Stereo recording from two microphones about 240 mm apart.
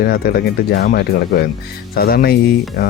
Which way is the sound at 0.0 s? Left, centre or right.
Left.